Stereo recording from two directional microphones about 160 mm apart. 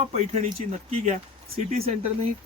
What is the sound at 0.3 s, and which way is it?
Speech, 45° right (ahead or behind).